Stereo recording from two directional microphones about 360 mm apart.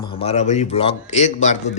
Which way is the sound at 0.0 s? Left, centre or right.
Centre.